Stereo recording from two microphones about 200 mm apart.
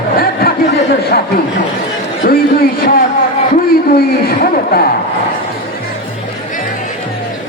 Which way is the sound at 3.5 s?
45° left (ahead or behind).